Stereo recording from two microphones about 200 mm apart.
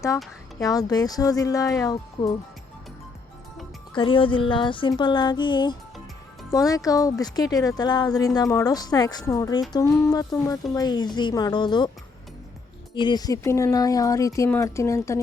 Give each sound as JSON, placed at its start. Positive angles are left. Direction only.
{"t": 0.6, "sound": "speech", "side_deg": 20}
{"t": 3.9, "sound": "speech", "side_deg": 25}
{"t": 12.9, "sound": "speech", "side_deg": 20}